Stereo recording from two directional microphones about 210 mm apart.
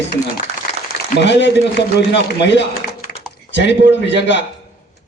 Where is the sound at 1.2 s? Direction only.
55° left (ahead or behind).